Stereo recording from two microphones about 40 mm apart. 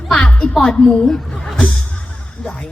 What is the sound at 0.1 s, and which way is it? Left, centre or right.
Music, left.